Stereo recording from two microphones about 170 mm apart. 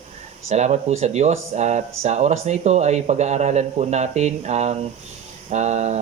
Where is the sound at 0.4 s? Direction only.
40° right (ahead or behind).